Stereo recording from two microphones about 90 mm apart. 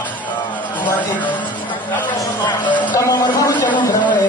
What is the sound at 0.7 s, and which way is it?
Speech, 55° left (ahead or behind).